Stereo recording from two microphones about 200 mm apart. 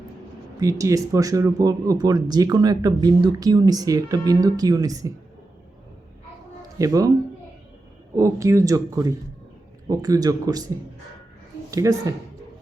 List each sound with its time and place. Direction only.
0.6 s speech: 15° right (ahead or behind)
6.7 s speech: 15° right (ahead or behind)
8.1 s speech: 15° right (ahead or behind)
11.7 s a woman's voice: 15° right (ahead or behind)